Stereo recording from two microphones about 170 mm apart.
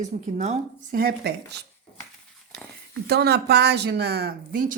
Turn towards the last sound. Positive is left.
turn(degrees=-60)  # may be behind; listen again after turning